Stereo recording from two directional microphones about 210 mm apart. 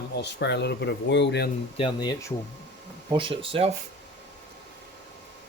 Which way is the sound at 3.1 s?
25° right (ahead or behind).